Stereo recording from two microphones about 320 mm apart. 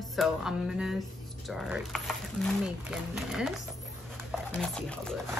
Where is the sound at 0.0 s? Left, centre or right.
Centre.